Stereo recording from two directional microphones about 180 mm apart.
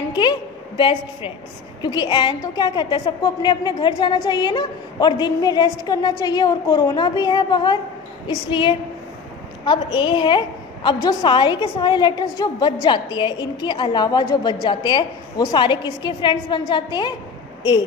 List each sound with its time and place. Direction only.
0.1 s a woman's voice: 25° left (ahead or behind)